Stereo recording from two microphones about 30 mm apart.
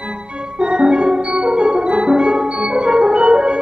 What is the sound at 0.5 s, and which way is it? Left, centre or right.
Steelpan, right.